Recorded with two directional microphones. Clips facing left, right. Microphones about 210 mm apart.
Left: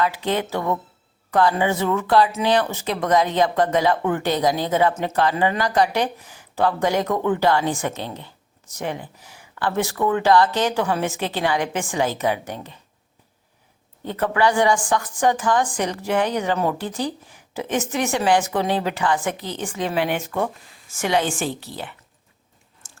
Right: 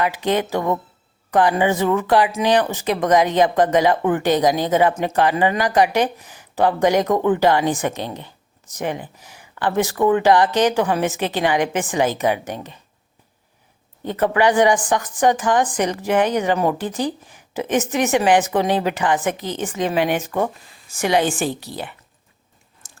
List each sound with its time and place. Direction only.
0.0 s speech: 15° right (ahead or behind)
14.0 s a woman's voice: 20° right (ahead or behind)
22.8 s chewing: 15° right (ahead or behind)